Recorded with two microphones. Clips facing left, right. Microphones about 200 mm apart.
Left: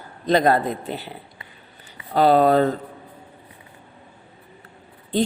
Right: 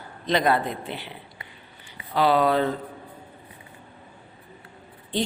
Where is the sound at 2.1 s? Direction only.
45° left (ahead or behind).